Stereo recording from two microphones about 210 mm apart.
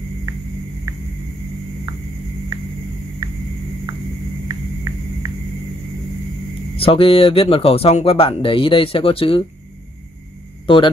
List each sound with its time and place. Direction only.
0.9 s music: 15° right (ahead or behind)
6.8 s speech: 25° left (ahead or behind)